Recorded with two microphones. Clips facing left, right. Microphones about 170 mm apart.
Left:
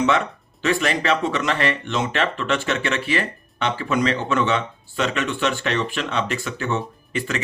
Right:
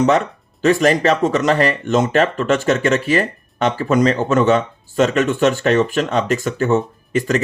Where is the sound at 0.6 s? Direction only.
40° right (ahead or behind).